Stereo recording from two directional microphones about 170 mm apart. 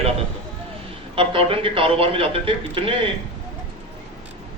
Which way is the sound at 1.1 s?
30° right (ahead or behind).